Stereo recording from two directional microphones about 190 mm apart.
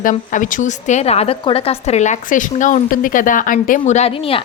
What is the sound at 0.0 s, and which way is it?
A woman's voice, 45° left (ahead or behind).